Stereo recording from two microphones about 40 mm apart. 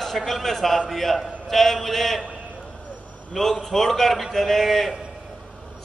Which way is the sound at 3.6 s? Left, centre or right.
Centre.